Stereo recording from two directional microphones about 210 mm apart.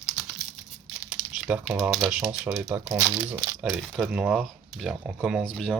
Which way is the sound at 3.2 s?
5° right (ahead or behind).